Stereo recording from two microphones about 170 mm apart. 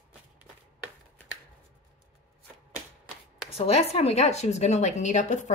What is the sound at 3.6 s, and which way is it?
Speech, 40° left (ahead or behind).